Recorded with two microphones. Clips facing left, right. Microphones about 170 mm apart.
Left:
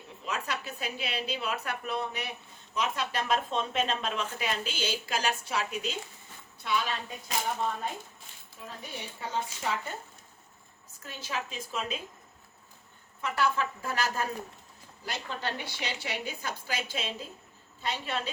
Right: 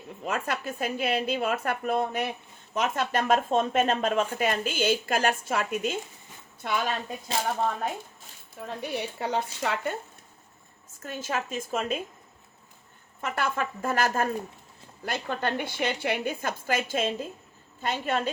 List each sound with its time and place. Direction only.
0.3 s a woman's voice: 50° right (ahead or behind)
8.6 s speech: 70° right (ahead or behind)
11.0 s a woman's voice: 50° right (ahead or behind)
13.2 s a woman's voice: 50° right (ahead or behind)